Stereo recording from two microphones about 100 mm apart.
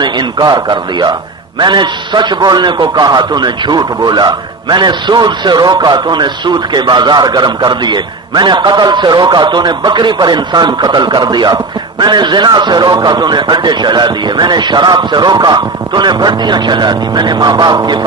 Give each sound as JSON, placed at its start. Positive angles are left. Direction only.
{"t": 0.0, "sound": "a man's voice", "side_deg": -45}